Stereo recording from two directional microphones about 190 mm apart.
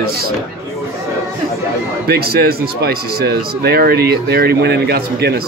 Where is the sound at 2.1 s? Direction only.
55° right (ahead or behind).